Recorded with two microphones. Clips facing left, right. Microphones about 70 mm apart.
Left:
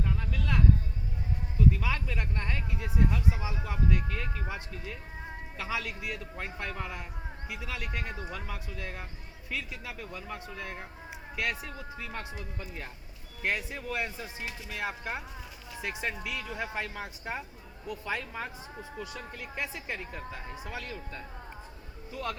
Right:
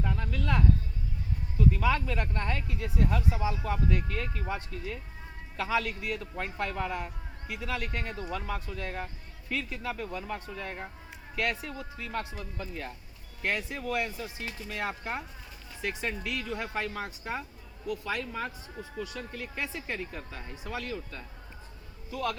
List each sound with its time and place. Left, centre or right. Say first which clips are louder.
0.0 s a sound: right 2 dB; centre
1.7 s speech: right 5 dB; centre
2.6 s speech: even; centre
14.0 s speech: right 1 dB; left
14.4 s speech: right 1 dB; centre; by 22.4 s left